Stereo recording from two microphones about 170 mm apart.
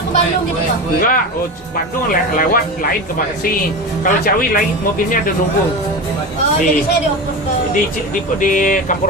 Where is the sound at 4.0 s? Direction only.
55° left (ahead or behind).